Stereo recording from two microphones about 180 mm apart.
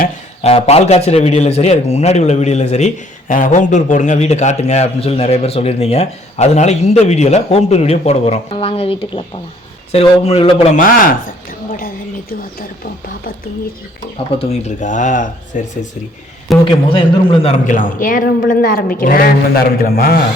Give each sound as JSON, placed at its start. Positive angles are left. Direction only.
{"t": 0.4, "sound": "a man's voice", "side_deg": 35}
{"t": 10.8, "sound": "a woman's voice", "side_deg": 50}
{"t": 14.3, "sound": "a woman's voice", "side_deg": 40}
{"t": 16.6, "sound": "a man's voice", "side_deg": 30}
{"t": 17.7, "sound": "a woman's voice", "side_deg": 50}